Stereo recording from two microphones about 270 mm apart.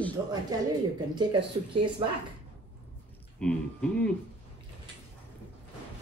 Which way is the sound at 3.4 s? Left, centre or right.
Centre.